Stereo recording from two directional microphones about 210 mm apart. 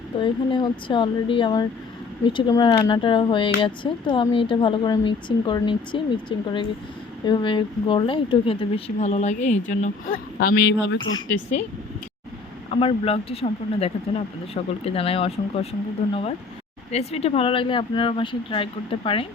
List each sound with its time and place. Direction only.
0.2 s speech: 20° left (ahead or behind)
10.4 s speech: 50° left (ahead or behind)
12.7 s speech: 25° left (ahead or behind)
16.9 s speech: 30° left (ahead or behind)